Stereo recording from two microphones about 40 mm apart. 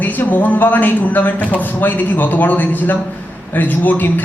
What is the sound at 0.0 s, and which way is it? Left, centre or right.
A man's voice, left.